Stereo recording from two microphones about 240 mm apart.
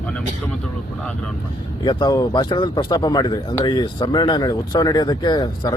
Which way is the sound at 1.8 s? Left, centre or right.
Centre.